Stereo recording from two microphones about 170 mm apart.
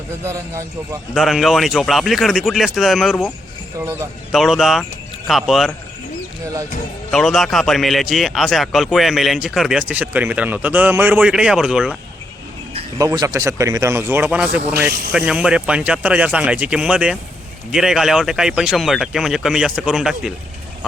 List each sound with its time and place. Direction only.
0.3 s speech: 15° right (ahead or behind)
1.1 s speech: centre (ahead or behind)
3.8 s speech: 15° right (ahead or behind)
4.3 s speech: centre (ahead or behind)
7.1 s speech: centre (ahead or behind)
13.0 s speech: 20° right (ahead or behind); by 20.3 s 5° right (ahead or behind)